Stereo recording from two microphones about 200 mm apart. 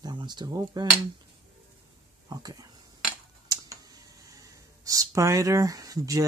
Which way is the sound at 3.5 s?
20° right (ahead or behind).